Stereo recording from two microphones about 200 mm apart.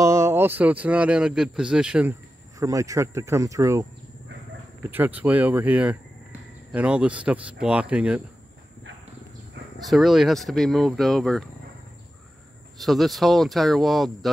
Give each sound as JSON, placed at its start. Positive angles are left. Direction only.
{"t": 0.0, "sound": "speech", "side_deg": -15}
{"t": 2.6, "sound": "speech", "side_deg": -15}
{"t": 4.8, "sound": "speech", "side_deg": -10}
{"t": 9.8, "sound": "speech", "side_deg": 0}
{"t": 12.7, "sound": "speech", "side_deg": 0}